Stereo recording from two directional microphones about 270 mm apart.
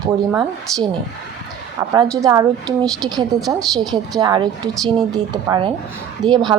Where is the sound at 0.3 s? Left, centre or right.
Centre.